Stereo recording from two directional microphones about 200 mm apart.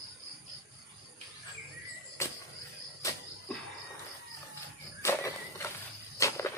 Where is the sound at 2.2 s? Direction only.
15° left (ahead or behind).